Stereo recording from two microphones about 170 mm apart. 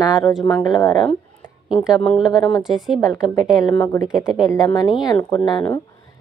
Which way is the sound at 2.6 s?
Centre (ahead or behind).